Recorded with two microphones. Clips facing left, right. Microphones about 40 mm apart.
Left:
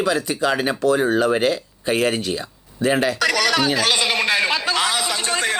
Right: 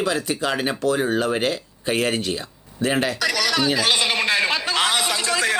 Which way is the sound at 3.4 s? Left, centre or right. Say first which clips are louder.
Even; left.